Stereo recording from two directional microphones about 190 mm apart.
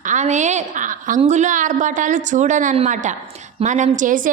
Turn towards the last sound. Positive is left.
turn(degrees=-45)  # may be behind; listen again after turning